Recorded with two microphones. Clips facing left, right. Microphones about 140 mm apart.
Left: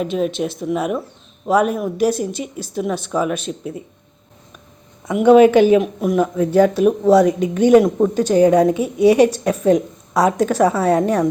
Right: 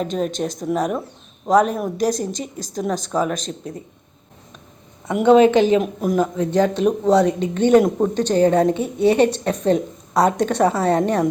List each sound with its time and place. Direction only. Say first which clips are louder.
0.1 s speech: left 3 dB; 5° left (ahead or behind)
0.3 s speech: left 2 dB; 40° right (ahead or behind)
1.5 s a woman's voice: even; 10° left (ahead or behind)
2.9 s speech: left 1 dB; 40° right (ahead or behind)
3.2 s a woman's voice: left 3 dB; 10° left (ahead or behind)
5.0 s a woman's voice: left 3 dB; 10° left (ahead or behind)